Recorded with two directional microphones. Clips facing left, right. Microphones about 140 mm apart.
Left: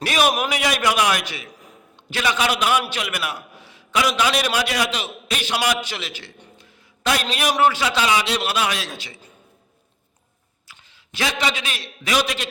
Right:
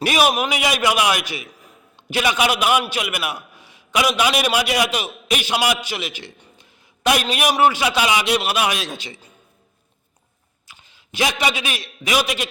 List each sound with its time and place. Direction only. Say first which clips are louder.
0.0 s a man's voice: right 2 dB; 10° right (ahead or behind)
10.7 s a man's voice: right 3 dB; 20° right (ahead or behind)